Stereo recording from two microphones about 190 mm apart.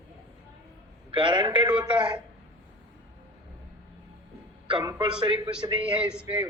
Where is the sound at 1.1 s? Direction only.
25° right (ahead or behind).